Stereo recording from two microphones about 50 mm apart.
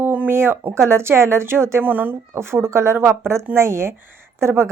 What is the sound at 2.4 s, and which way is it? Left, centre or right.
A woman's voice, right.